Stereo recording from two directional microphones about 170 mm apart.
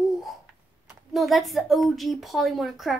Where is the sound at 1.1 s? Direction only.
Centre (ahead or behind).